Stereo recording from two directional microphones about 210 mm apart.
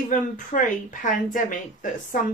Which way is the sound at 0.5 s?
35° left (ahead or behind).